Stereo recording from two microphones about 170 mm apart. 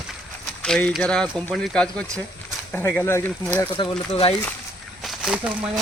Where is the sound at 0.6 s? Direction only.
5° left (ahead or behind).